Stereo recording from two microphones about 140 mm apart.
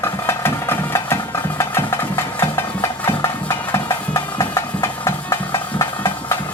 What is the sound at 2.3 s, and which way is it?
Music, 20° left (ahead or behind).